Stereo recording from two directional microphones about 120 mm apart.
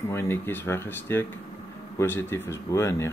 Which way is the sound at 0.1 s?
20° left (ahead or behind).